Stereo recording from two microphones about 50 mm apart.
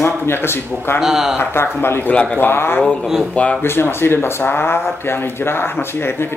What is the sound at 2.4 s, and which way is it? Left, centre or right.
Speech, left.